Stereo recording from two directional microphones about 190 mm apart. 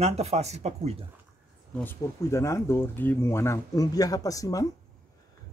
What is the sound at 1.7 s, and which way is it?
Speech, 10° left (ahead or behind).